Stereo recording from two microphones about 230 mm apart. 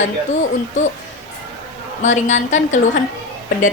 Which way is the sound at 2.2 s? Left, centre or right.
Left.